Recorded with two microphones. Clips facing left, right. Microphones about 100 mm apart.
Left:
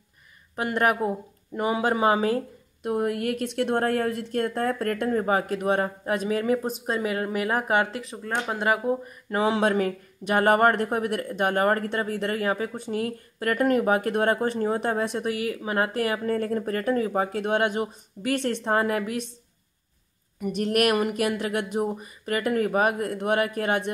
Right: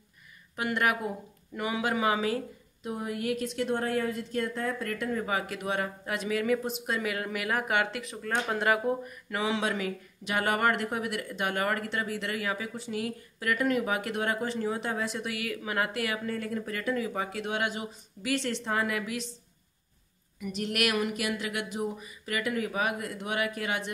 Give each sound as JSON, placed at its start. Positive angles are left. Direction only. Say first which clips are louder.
{"t": 0.6, "sound": "a woman's voice", "louder": "left 5 dB", "side_deg": 35}
{"t": 2.8, "sound": "a woman's voice", "louder": "left 8 dB", "side_deg": 60}
{"t": 9.3, "sound": "a woman's voice", "louder": "left 7 dB", "side_deg": 45}
{"t": 15.3, "sound": "a woman's voice", "louder": "left 5 dB", "side_deg": 30}
{"t": 20.3, "sound": "a woman's voice", "louder": "left 8 dB", "side_deg": 45}